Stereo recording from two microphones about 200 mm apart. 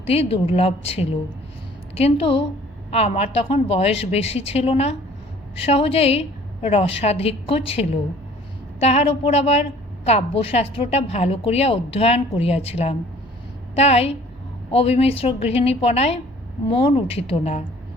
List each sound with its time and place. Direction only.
0.0 s a woman's voice: 30° left (ahead or behind)